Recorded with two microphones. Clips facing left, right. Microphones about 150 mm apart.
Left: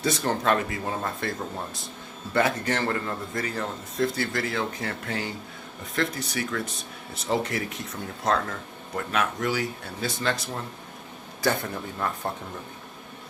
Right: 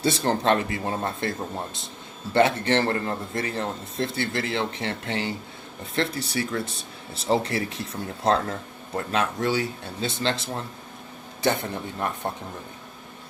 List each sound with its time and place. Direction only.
0.0 s a man's voice: 30° right (ahead or behind)